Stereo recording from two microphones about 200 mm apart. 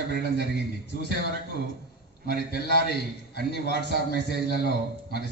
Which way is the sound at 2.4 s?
50° left (ahead or behind).